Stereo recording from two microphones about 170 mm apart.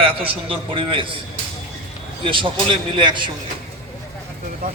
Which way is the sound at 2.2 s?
30° right (ahead or behind).